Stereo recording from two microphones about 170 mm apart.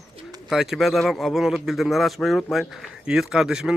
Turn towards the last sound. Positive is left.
turn(degrees=-5)  # may be behind; listen again after turning